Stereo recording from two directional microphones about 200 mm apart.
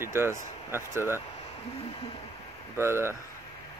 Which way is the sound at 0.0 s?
10° right (ahead or behind).